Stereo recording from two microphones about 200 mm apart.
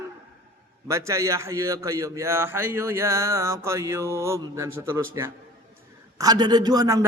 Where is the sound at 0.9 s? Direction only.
15° right (ahead or behind).